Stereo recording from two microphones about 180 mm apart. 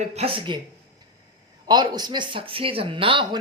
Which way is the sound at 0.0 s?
35° right (ahead or behind).